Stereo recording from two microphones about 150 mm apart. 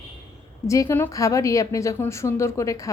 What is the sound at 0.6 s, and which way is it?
A woman's voice, 20° left (ahead or behind).